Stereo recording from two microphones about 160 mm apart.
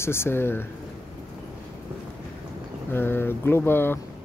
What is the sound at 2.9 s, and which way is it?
Speech, 15° left (ahead or behind).